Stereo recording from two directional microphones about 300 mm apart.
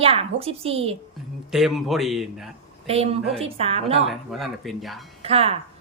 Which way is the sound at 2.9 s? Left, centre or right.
Centre.